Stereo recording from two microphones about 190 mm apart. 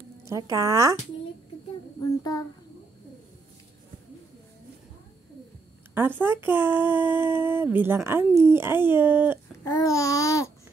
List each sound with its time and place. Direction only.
0.2 s speech: 15° right (ahead or behind)
2.0 s a sound: 20° left (ahead or behind)
5.9 s speech: 10° right (ahead or behind)
9.7 s babbling: 20° left (ahead or behind)